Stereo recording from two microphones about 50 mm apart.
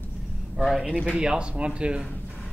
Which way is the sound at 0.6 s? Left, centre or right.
Centre.